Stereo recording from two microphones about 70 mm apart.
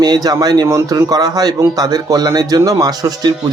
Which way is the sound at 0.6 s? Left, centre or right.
Right.